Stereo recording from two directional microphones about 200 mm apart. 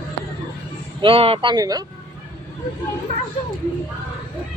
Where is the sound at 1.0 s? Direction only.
25° right (ahead or behind).